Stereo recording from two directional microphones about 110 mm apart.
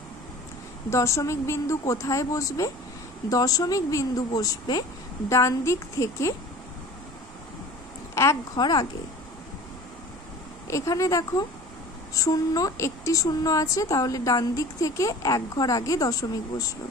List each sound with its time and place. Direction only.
0.8 s a woman's voice: 25° left (ahead or behind)
8.1 s a sound: 25° left (ahead or behind)
8.5 s a woman's voice: 40° left (ahead or behind)
10.7 s a woman's voice: 30° left (ahead or behind)